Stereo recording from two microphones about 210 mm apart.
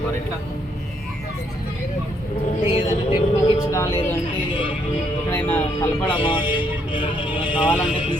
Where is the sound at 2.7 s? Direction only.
25° left (ahead or behind).